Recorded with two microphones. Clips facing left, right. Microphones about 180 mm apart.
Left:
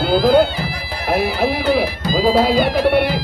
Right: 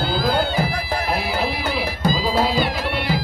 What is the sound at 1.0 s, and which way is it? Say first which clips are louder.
Music: left 9 dB; 55° left (ahead or behind).